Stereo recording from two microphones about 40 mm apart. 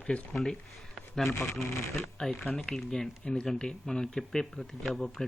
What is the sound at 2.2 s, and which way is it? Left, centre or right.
Speech, centre.